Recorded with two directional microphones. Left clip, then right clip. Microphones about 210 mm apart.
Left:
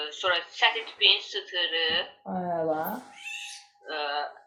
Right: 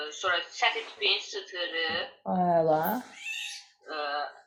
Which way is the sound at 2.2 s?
45° right (ahead or behind).